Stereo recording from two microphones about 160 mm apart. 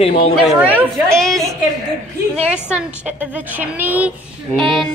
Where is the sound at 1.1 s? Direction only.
5° left (ahead or behind).